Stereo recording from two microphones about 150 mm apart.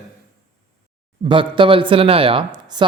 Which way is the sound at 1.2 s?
35° right (ahead or behind).